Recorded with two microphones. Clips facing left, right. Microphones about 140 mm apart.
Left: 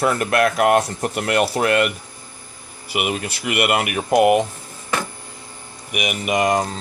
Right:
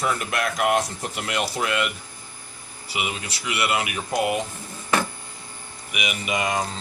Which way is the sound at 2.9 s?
55° left (ahead or behind).